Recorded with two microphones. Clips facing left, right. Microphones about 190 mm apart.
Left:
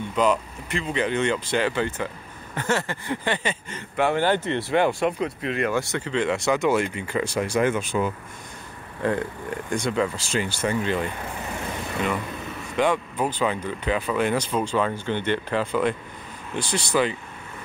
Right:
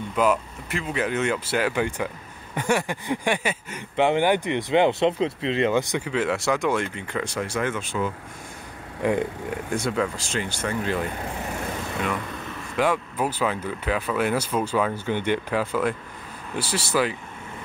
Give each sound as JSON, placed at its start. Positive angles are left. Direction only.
{"t": 0.1, "sound": "speech", "side_deg": -5}
{"t": 9.0, "sound": "speech", "side_deg": -15}
{"t": 9.7, "sound": "speech", "side_deg": -5}
{"t": 12.7, "sound": "speech", "side_deg": -5}